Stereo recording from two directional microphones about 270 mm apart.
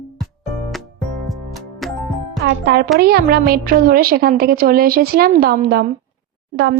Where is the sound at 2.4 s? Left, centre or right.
Right.